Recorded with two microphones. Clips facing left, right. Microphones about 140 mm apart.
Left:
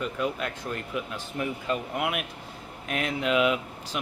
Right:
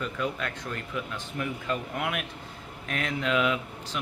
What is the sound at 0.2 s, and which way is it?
Speech, 20° left (ahead or behind).